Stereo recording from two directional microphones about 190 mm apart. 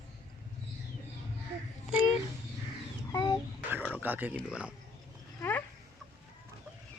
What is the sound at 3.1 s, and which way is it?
Chicken, 20° left (ahead or behind).